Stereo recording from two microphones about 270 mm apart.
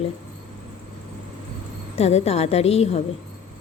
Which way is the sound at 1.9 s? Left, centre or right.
Left.